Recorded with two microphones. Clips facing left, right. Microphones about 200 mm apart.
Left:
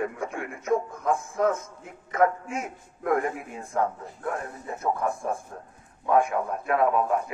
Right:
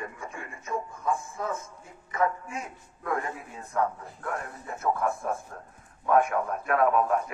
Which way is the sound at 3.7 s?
25° left (ahead or behind).